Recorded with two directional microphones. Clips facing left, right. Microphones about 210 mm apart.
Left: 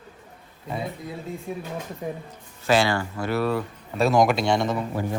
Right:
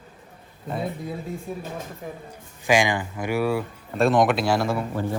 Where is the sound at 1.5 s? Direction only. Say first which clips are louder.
Left 3 dB; centre (ahead or behind).